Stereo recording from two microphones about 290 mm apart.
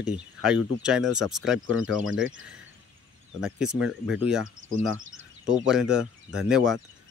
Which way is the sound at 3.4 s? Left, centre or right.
Centre.